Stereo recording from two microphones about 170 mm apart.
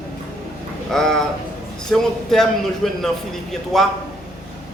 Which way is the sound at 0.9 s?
5° left (ahead or behind).